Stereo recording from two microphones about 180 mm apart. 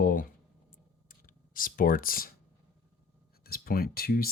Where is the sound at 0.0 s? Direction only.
50° left (ahead or behind).